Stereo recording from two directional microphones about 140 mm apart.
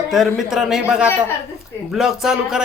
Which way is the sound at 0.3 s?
5° right (ahead or behind).